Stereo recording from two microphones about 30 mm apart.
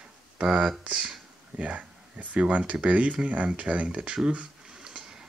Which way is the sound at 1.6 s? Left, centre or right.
Right.